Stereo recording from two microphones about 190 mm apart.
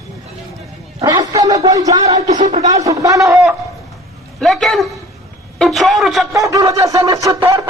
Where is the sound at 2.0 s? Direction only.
35° right (ahead or behind).